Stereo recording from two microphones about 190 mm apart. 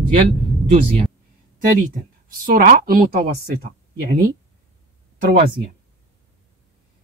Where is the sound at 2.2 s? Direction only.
50° right (ahead or behind).